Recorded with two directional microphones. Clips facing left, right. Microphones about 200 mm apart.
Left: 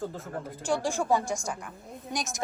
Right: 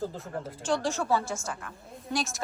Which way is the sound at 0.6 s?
10° left (ahead or behind).